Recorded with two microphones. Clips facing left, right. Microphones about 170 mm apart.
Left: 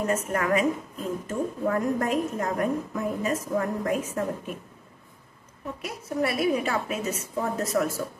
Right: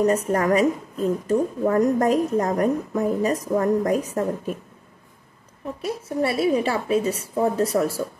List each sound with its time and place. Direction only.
0.0 s a woman's voice: 35° right (ahead or behind)
5.8 s a woman's voice: 30° right (ahead or behind)